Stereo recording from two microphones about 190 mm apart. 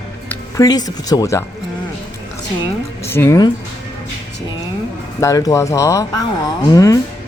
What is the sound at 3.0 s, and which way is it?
Speech, 15° left (ahead or behind).